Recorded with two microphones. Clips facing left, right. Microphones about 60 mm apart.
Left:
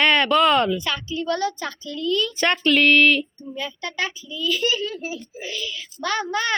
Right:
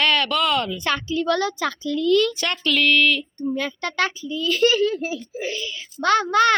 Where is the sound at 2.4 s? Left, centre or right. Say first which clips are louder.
Left 4 dB; left.